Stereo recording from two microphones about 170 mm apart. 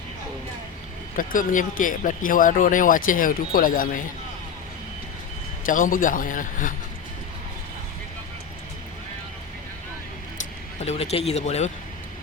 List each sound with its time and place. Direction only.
1.1 s speech: 55° left (ahead or behind)
5.6 s speech: 50° left (ahead or behind)
10.8 s speech: 35° left (ahead or behind)